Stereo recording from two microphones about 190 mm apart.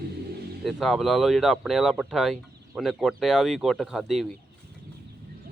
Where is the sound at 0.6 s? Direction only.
Centre (ahead or behind).